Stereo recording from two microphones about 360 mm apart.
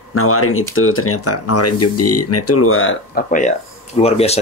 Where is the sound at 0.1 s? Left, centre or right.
Left.